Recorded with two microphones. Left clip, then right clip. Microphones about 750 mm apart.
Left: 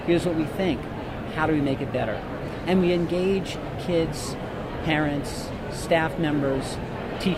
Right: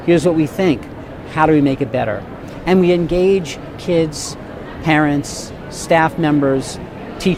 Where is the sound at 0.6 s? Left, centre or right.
Right.